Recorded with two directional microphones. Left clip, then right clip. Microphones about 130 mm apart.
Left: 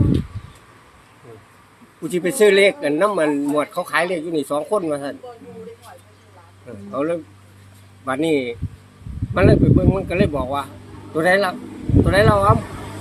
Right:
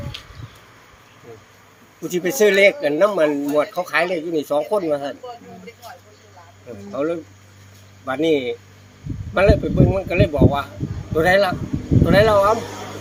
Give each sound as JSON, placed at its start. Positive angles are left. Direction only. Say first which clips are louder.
{"t": 2.0, "sound": "speech", "louder": "left 1 dB", "side_deg": 25}
{"t": 6.9, "sound": "speech", "louder": "left 1 dB", "side_deg": 35}